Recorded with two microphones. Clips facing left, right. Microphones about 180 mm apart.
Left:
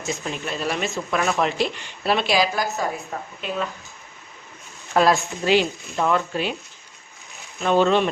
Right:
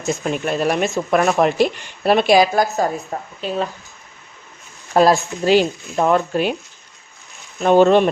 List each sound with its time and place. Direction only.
0.1 s speech: 50° right (ahead or behind); by 3.7 s 35° right (ahead or behind)
4.9 s speech: 40° right (ahead or behind)
7.6 s speech: 50° right (ahead or behind)